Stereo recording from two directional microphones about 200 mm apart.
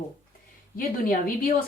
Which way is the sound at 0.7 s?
45° left (ahead or behind).